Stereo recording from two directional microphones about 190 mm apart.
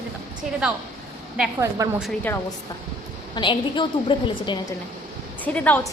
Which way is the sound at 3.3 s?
25° left (ahead or behind).